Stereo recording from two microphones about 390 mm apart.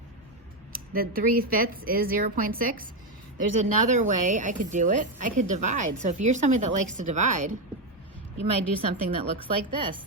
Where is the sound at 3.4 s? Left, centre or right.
Right.